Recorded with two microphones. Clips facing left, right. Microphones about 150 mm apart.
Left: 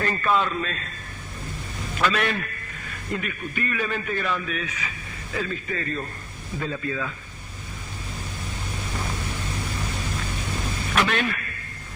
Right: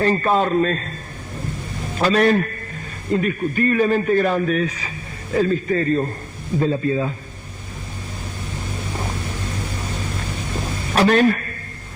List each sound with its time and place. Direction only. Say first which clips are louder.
0.0 s a man's voice: right 6 dB; 35° right (ahead or behind)
2.0 s a man's voice: right 8 dB; 35° right (ahead or behind)
10.9 s a man's voice: right 10 dB; 40° right (ahead or behind)